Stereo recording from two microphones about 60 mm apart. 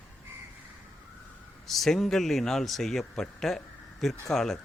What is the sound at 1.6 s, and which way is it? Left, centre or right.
Speech, centre.